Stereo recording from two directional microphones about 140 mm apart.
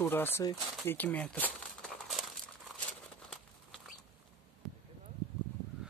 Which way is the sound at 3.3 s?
5° left (ahead or behind).